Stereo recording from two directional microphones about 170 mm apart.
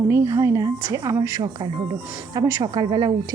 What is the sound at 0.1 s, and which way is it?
A woman's voice, 15° right (ahead or behind).